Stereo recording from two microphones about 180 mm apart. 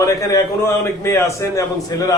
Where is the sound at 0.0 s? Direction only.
15° left (ahead or behind).